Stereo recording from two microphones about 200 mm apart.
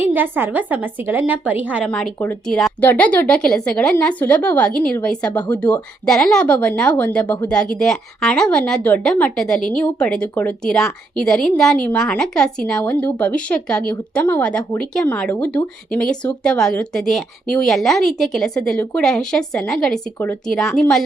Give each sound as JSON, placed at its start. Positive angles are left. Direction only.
{"t": 0.0, "sound": "a woman's voice", "side_deg": -10}
{"t": 1.9, "sound": "a woman's voice", "side_deg": 5}